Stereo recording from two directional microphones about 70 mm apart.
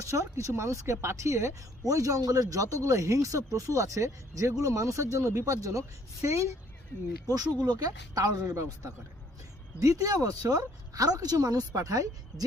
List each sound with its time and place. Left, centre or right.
0.0 s speech: right
7.7 s a woman's voice: right